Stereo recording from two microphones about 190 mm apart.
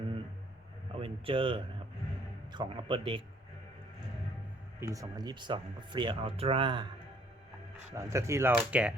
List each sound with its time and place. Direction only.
0.9 s a sound: 30° right (ahead or behind)
2.5 s speech: 25° right (ahead or behind)
4.8 s speech: 15° right (ahead or behind)
7.9 s speech: 15° right (ahead or behind)